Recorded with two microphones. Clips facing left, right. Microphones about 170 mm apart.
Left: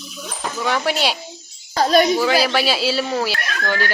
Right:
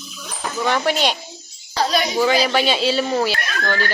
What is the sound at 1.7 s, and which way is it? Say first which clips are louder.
Speech: left 5 dB; 45° left (ahead or behind).